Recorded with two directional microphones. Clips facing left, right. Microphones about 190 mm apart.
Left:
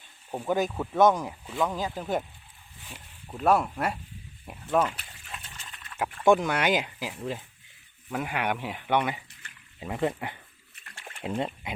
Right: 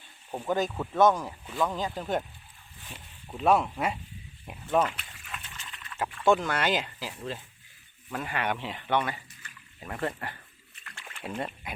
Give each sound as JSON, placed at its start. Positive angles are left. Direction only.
{"t": 0.3, "sound": "speech", "side_deg": 10}
{"t": 3.2, "sound": "speech", "side_deg": 0}
{"t": 4.9, "sound": "water", "side_deg": 35}
{"t": 6.2, "sound": "speech", "side_deg": 15}